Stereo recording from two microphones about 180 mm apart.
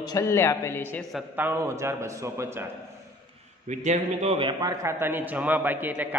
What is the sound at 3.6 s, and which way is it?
Speech, 40° right (ahead or behind).